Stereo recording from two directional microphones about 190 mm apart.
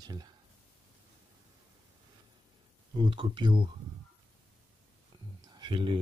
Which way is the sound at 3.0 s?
25° right (ahead or behind).